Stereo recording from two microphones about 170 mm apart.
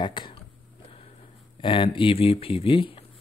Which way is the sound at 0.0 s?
25° left (ahead or behind).